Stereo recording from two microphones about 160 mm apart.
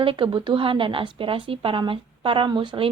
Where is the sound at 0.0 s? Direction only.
35° right (ahead or behind).